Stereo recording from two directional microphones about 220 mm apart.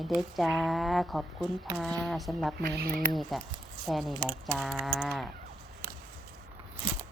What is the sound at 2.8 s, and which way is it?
Speech, 40° right (ahead or behind).